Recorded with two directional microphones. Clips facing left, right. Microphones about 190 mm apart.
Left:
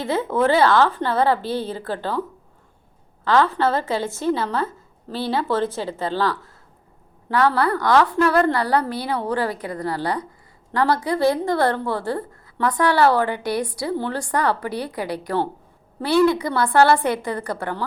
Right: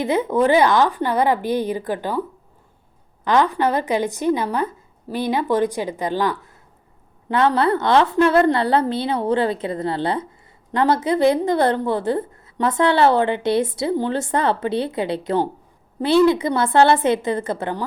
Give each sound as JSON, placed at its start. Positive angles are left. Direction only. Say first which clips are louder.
{"t": 0.0, "sound": "a woman's voice", "louder": "right 2 dB", "side_deg": -15}
{"t": 3.2, "sound": "a woman's voice", "louder": "right 1 dB", "side_deg": -15}